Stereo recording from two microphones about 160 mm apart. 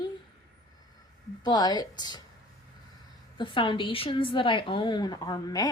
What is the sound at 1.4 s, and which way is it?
Speech, 25° left (ahead or behind).